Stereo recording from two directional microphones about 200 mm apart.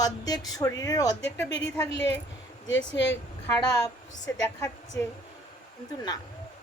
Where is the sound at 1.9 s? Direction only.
60° left (ahead or behind).